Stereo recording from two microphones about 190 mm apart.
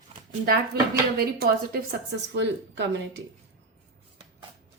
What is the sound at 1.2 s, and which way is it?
Speech, 55° right (ahead or behind).